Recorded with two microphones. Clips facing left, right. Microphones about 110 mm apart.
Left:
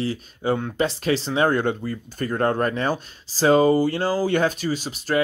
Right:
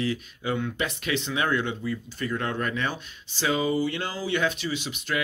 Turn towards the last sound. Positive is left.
turn(degrees=40)  # may be behind; listen again after turning